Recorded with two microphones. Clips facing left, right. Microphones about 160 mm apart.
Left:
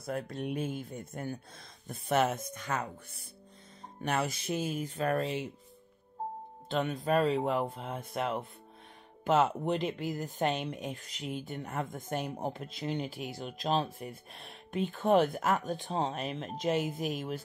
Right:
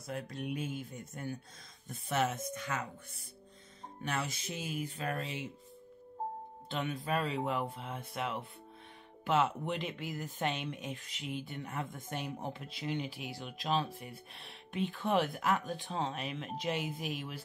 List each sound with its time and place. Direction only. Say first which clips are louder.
0.0 s speech: left 4 dB; 55° left (ahead or behind)
2.5 s speech: left 3 dB; 40° left (ahead or behind)
4.0 s speech: left 5 dB; 55° left (ahead or behind)
6.7 s speech: left 6 dB; 40° left (ahead or behind)